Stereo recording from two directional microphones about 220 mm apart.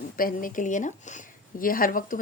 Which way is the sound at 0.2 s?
40° left (ahead or behind).